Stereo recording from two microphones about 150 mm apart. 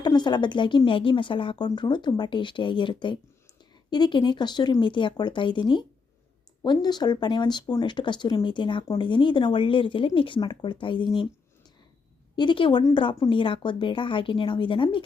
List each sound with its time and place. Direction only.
0.0 s speech: 30° left (ahead or behind)
12.4 s speech: 35° left (ahead or behind)